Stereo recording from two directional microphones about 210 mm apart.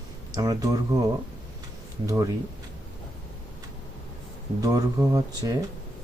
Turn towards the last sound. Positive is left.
turn(degrees=-15)  # may be behind; listen again after turning